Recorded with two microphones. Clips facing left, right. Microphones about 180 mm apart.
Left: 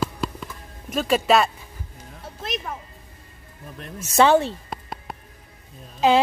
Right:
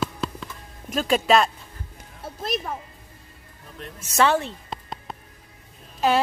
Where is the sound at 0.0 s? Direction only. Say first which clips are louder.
Left 1 dB; 5° left (ahead or behind).